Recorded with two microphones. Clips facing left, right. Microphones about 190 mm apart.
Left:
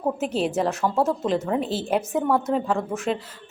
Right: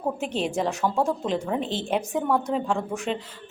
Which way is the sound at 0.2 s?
5° left (ahead or behind).